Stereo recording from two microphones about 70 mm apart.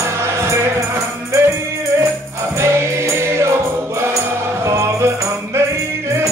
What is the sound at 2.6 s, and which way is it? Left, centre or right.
Music, right.